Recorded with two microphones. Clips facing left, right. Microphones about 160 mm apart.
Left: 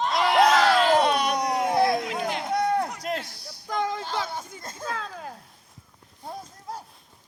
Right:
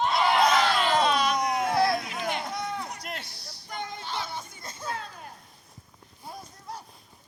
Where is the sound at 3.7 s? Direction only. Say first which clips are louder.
Left 8 dB; 90° left.